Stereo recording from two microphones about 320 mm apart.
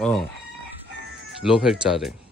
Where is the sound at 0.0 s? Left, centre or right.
Centre.